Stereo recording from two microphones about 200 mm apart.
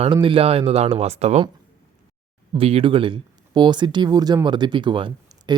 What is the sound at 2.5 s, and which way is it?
Speech, 30° right (ahead or behind).